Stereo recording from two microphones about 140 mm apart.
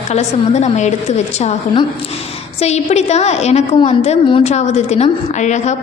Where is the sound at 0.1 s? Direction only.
55° left (ahead or behind).